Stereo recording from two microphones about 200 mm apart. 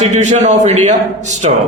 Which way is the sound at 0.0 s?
35° right (ahead or behind).